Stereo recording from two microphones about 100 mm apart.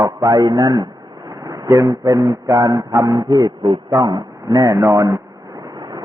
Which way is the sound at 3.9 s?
40° right (ahead or behind).